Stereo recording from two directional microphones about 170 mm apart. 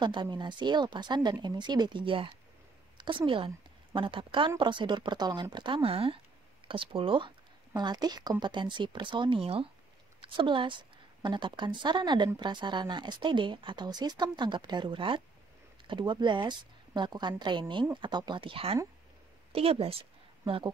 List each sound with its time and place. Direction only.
0.0 s a woman's voice: 25° right (ahead or behind)